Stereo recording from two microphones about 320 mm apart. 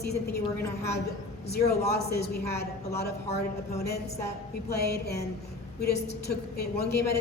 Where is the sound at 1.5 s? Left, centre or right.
Left.